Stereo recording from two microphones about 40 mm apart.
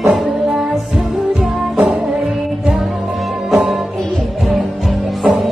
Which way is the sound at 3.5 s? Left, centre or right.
Centre.